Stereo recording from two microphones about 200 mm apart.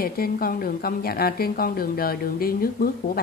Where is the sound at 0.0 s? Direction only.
50° left (ahead or behind).